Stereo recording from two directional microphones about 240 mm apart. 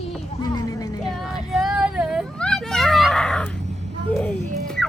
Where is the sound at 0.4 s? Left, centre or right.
Centre.